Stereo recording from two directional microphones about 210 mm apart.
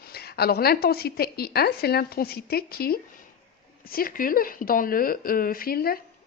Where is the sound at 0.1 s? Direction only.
50° left (ahead or behind).